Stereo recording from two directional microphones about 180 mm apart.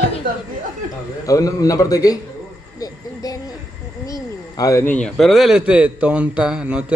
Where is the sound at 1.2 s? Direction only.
20° left (ahead or behind).